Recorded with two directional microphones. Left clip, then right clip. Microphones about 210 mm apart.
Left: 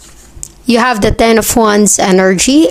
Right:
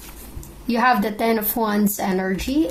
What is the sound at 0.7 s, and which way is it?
Speech, 45° left (ahead or behind).